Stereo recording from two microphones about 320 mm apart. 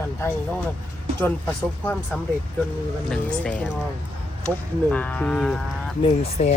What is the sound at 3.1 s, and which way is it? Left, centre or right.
Speech, centre.